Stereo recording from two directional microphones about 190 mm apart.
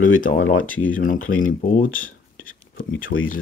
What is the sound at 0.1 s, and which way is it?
Speech, 45° left (ahead or behind).